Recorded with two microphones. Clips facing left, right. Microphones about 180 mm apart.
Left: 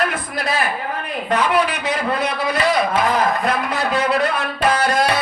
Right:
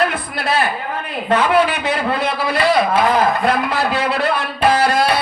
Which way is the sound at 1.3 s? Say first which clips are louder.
Right 3 dB; 30° right (ahead or behind).